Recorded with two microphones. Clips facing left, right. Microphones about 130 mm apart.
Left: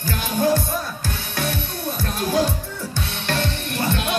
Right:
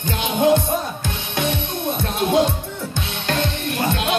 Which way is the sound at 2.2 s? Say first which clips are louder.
Right 3 dB; 25° right (ahead or behind).